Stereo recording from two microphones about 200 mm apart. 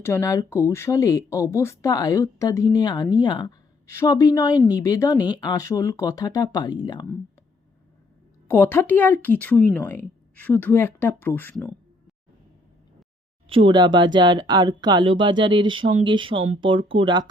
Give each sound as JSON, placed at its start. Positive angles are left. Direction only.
{"t": 0.0, "sound": "speech", "side_deg": 15}
{"t": 8.4, "sound": "speech", "side_deg": 10}
{"t": 13.5, "sound": "speech", "side_deg": -25}